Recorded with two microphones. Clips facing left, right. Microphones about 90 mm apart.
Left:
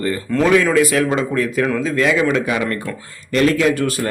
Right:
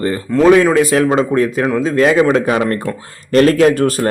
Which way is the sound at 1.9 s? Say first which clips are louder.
Right 7 dB; 40° right (ahead or behind).